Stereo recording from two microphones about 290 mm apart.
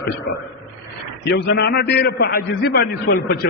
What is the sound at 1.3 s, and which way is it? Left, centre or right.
A man's voice, left.